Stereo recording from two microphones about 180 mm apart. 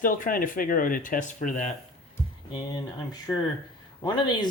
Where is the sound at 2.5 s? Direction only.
20° left (ahead or behind).